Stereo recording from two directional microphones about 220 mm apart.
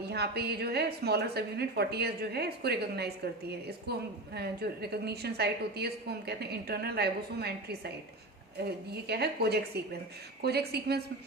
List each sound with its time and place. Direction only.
0.0 s a woman's voice: 45° right (ahead or behind)